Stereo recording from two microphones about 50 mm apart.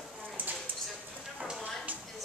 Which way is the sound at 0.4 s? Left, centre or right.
Right.